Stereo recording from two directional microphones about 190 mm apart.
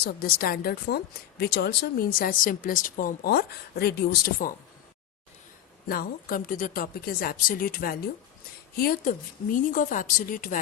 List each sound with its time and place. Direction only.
0.0 s a woman's voice: 50° left (ahead or behind)
5.9 s a woman's voice: 50° left (ahead or behind)